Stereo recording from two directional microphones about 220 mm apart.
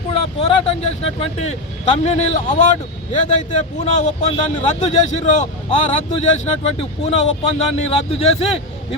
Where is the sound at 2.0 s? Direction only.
30° left (ahead or behind).